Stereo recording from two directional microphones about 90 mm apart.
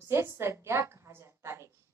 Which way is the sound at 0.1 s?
30° right (ahead or behind).